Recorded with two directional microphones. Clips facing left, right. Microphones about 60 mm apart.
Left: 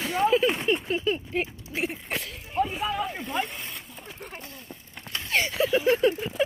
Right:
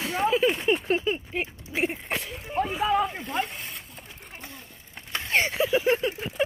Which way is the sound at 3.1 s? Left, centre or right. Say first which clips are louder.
Even; centre.